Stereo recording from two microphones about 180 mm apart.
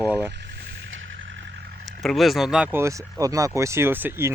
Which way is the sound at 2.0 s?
Centre (ahead or behind).